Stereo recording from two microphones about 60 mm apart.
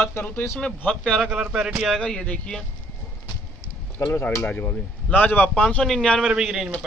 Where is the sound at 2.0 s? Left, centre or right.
Centre.